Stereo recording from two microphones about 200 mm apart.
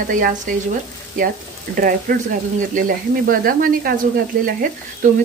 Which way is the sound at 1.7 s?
45° right (ahead or behind).